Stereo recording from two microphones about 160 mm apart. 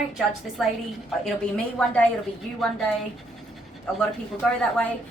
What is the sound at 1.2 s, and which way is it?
Speech, 5° left (ahead or behind).